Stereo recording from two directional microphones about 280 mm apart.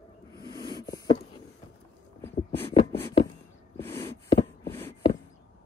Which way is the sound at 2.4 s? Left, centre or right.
Centre.